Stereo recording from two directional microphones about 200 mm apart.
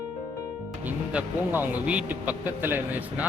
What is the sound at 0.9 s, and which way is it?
Speech, 10° right (ahead or behind).